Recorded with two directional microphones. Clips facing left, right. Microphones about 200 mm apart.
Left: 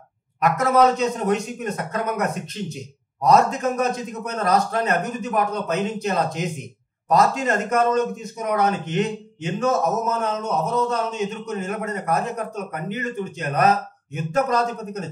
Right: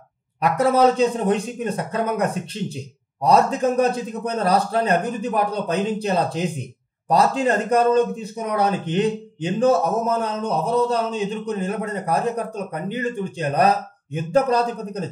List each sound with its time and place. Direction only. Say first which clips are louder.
0.4 s speech: right 1 dB; 30° right (ahead or behind)